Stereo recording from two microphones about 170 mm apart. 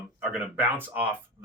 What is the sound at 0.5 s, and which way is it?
Speech, 10° right (ahead or behind).